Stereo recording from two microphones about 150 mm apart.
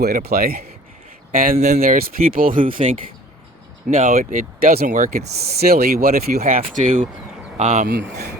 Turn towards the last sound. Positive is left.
turn(degrees=-60)  # may be behind; listen again after turning